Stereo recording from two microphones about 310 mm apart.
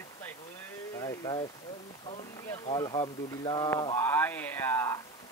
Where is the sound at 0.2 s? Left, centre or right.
Centre.